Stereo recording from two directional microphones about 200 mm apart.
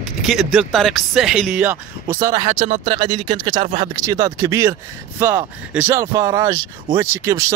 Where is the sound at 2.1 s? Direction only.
15° right (ahead or behind).